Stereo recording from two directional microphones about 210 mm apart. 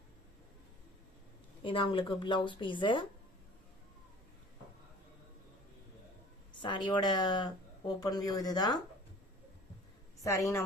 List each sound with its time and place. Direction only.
1.6 s a woman's voice: 25° left (ahead or behind)
6.6 s a woman's voice: 20° left (ahead or behind)
10.2 s a woman's voice: 15° left (ahead or behind)